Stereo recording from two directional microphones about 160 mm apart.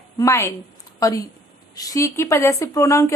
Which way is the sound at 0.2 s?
15° left (ahead or behind).